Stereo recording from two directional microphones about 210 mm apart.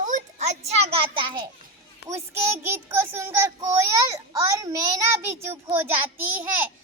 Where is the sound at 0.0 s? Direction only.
35° right (ahead or behind).